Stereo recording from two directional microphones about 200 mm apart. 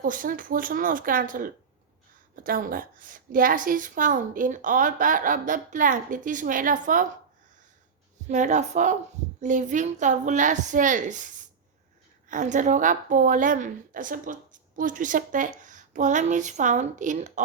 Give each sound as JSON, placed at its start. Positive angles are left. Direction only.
{"t": 0.0, "sound": "a woman's voice", "side_deg": -45}
{"t": 8.3, "sound": "a woman's voice", "side_deg": -35}